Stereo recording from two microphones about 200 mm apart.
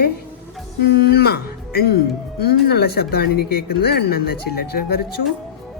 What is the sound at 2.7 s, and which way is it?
Speech, 50° left (ahead or behind).